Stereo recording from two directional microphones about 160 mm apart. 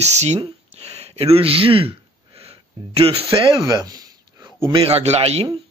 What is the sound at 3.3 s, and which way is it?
Speech, 30° right (ahead or behind).